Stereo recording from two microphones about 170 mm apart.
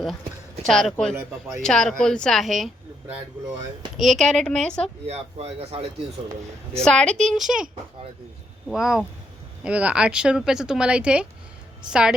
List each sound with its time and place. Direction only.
0.6 s speech: centre (ahead or behind)
3.9 s speech: centre (ahead or behind)
5.0 s a man's voice: 40° right (ahead or behind)
6.8 s speech: 5° left (ahead or behind)
8.7 s speech: centre (ahead or behind)